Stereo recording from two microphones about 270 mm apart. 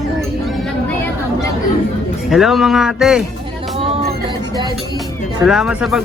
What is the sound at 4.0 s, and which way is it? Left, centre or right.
Music, right.